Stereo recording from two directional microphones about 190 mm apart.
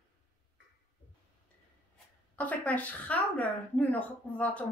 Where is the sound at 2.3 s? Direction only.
10° left (ahead or behind).